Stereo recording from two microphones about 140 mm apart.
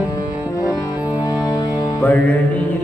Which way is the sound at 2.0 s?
10° left (ahead or behind).